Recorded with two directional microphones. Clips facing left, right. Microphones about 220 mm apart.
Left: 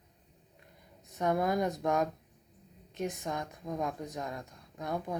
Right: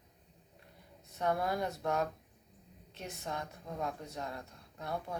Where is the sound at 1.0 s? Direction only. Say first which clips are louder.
Left 4 dB; 15° left (ahead or behind).